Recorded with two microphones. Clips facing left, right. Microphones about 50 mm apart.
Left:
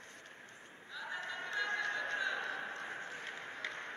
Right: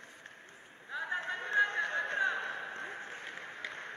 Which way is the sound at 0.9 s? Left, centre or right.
Right.